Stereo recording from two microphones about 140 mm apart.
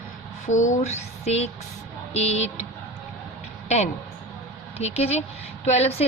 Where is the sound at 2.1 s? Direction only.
50° left (ahead or behind).